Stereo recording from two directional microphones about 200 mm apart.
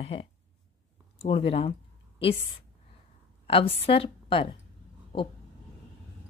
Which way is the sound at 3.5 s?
30° left (ahead or behind).